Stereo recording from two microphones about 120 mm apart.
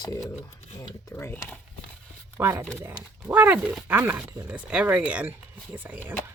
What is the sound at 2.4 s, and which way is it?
Speech, 20° right (ahead or behind).